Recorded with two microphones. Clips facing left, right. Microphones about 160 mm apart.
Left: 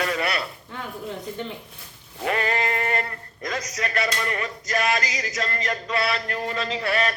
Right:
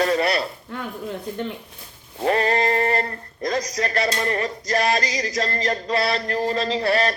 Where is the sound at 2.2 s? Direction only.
35° right (ahead or behind).